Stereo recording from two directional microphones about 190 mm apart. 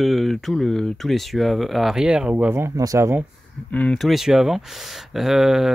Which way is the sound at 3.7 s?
5° left (ahead or behind).